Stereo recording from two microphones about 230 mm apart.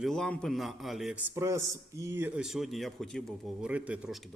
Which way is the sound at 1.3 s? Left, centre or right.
Centre.